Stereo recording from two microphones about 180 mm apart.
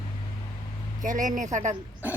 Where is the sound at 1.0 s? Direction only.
45° right (ahead or behind).